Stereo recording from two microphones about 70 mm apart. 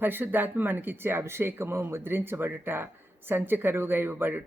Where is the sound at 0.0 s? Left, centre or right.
Right.